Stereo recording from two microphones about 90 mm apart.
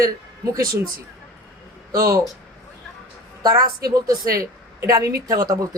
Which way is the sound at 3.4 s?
45° right (ahead or behind).